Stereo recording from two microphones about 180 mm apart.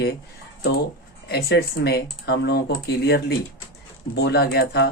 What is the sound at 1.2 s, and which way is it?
Speech, 65° left (ahead or behind).